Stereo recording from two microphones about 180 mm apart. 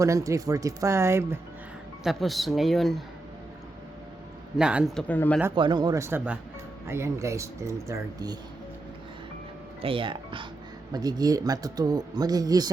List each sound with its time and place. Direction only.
0.0 s speech: 15° right (ahead or behind)
2.0 s speech: centre (ahead or behind)
4.5 s speech: 5° right (ahead or behind)
5.5 s speech: 25° right (ahead or behind)
9.8 s speech: 30° right (ahead or behind)